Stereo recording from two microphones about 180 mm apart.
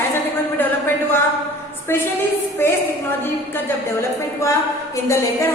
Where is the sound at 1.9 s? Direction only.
15° left (ahead or behind).